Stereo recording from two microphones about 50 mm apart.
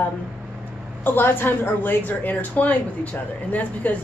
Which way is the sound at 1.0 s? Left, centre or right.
Left.